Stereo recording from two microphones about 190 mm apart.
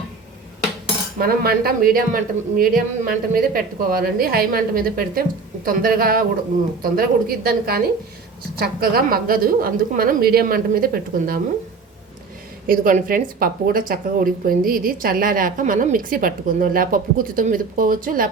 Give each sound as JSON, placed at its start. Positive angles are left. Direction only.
{"t": 1.2, "sound": "speech", "side_deg": -50}
{"t": 12.6, "sound": "speech", "side_deg": -50}